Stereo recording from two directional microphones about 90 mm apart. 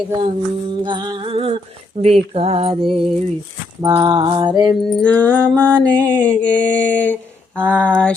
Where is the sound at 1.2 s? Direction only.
90° right.